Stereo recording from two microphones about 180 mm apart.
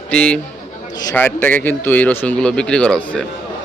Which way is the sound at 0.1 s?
5° left (ahead or behind).